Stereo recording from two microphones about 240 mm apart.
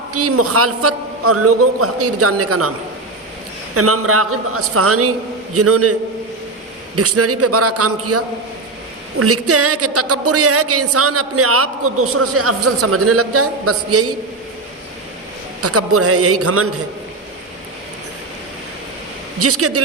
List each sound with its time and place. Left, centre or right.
0.1 s a woman's voice: right
3.8 s a woman's voice: right
15.6 s a woman's voice: right
19.4 s a woman's voice: right